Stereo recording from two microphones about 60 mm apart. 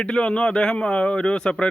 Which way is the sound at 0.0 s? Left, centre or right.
Centre.